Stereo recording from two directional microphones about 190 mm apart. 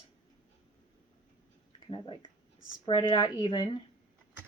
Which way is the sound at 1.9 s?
25° left (ahead or behind).